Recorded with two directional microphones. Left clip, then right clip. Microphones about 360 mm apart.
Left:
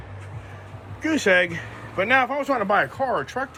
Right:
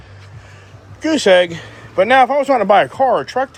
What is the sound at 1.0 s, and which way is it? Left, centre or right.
A man's voice, centre.